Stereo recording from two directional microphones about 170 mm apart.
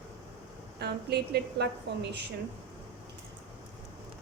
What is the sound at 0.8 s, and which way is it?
A woman's voice, 75° right (ahead or behind).